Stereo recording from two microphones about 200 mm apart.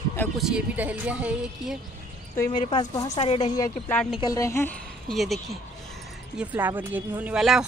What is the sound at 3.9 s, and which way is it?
Speech, 5° left (ahead or behind).